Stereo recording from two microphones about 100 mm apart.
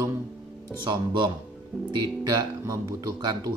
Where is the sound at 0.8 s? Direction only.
50° right (ahead or behind).